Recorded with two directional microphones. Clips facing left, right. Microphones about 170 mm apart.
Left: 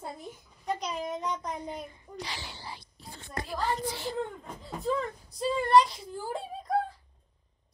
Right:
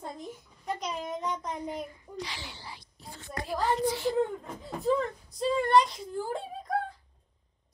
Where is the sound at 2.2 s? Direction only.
35° left (ahead or behind).